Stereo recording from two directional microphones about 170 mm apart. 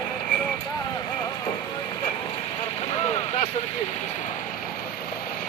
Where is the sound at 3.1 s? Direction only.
40° left (ahead or behind).